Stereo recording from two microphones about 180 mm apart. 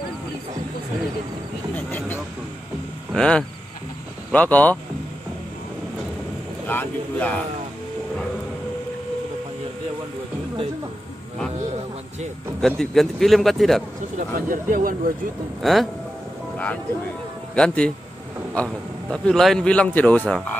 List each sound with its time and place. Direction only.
1.8 s vehicle: 10° left (ahead or behind)
3.1 s speech: 5° left (ahead or behind)
6.7 s speech: 10° left (ahead or behind)
12.5 s a man's voice: centre (ahead or behind)
14.1 s speech: 45° right (ahead or behind)
15.6 s a man's voice: centre (ahead or behind)
17.6 s a man's voice: 5° left (ahead or behind)